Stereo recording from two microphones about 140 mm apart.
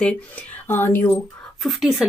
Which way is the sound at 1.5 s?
Centre (ahead or behind).